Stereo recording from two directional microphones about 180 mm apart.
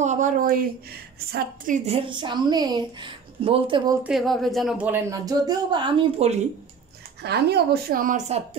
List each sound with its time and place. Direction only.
0.0 s speech: 45° right (ahead or behind)
1.9 s a woman's voice: 30° right (ahead or behind)
4.0 s speech: centre (ahead or behind)
4.9 s a woman's voice: 20° right (ahead or behind); by 6.4 s 35° right (ahead or behind)
7.2 s speech: 65° right (ahead or behind); by 8.4 s 50° right (ahead or behind)